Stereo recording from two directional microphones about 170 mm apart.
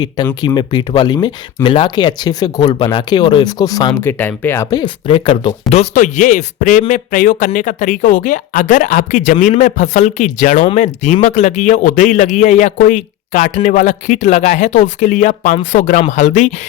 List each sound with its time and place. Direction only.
0.4 s a man's voice: 25° left (ahead or behind); by 16.5 s 45° left (ahead or behind)